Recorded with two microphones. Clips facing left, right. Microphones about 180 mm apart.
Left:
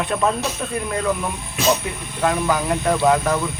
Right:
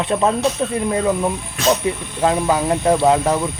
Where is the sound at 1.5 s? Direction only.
5° left (ahead or behind).